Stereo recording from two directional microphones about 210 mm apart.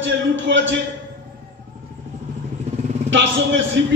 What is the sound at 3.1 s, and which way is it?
Speech, 60° right (ahead or behind).